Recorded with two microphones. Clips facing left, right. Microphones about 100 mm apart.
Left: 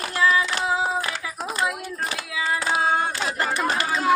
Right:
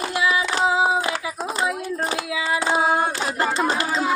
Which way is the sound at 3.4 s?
25° right (ahead or behind).